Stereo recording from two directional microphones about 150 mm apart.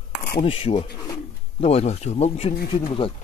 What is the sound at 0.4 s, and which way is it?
Speech, 35° left (ahead or behind).